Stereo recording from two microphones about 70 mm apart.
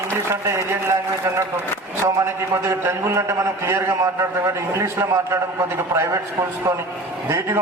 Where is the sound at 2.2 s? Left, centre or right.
Right.